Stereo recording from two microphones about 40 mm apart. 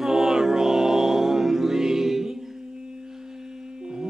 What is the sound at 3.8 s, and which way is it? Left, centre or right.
Humming, centre.